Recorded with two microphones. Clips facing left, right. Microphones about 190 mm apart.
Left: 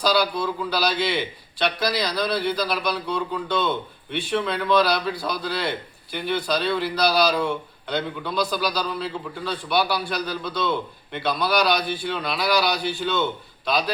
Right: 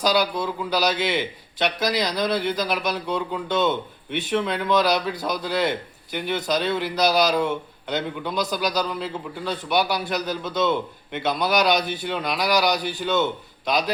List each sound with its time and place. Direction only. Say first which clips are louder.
0.0 s a man's voice: even; 20° right (ahead or behind)